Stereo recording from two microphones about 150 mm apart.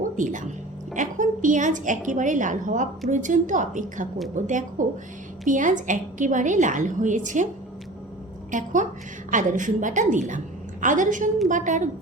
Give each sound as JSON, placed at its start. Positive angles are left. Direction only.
{"t": 0.2, "sound": "a woman's voice", "side_deg": -60}
{"t": 8.4, "sound": "a woman's voice", "side_deg": -55}